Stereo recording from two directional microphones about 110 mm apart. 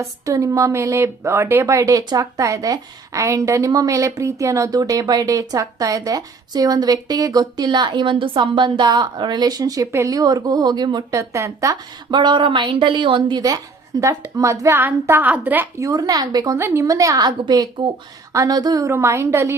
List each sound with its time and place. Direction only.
0.0 s speech: 30° right (ahead or behind)
12.1 s speech: 45° right (ahead or behind)
14.0 s a woman's voice: 30° right (ahead or behind); by 15.7 s 15° right (ahead or behind)
15.8 s speech: 35° right (ahead or behind)
16.6 s speech: 25° right (ahead or behind)
18.9 s a woman's voice: 25° right (ahead or behind)